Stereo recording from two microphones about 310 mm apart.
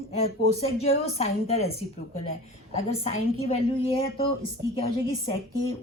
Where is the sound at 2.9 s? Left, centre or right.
Centre.